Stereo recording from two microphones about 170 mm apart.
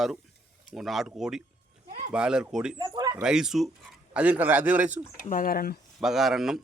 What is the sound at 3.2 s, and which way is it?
Speech, 5° right (ahead or behind).